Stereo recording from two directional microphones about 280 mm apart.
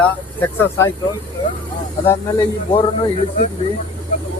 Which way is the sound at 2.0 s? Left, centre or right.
Centre.